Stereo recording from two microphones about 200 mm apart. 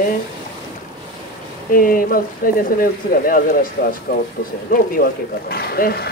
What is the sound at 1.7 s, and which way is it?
Speech, 45° left (ahead or behind).